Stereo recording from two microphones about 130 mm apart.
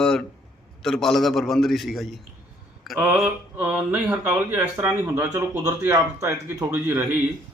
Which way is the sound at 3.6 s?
10° right (ahead or behind).